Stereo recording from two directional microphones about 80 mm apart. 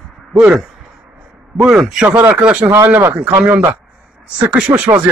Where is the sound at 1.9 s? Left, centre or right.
Centre.